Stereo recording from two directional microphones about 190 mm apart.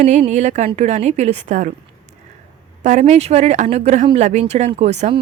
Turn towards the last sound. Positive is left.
turn(degrees=-35)  # may be behind; listen again after turning